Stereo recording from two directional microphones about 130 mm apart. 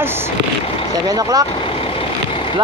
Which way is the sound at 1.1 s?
30° right (ahead or behind).